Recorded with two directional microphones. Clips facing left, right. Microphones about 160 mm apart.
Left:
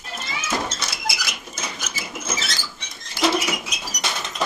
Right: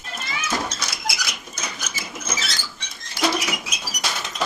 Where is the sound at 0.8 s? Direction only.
Centre (ahead or behind).